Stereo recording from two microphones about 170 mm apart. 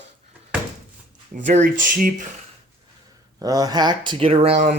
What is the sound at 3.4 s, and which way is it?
Speech, 20° right (ahead or behind).